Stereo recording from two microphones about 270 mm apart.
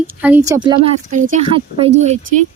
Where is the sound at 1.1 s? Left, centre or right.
Right.